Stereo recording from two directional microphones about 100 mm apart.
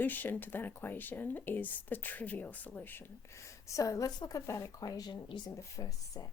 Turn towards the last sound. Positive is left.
turn(degrees=30)  # may be behind; listen again after turning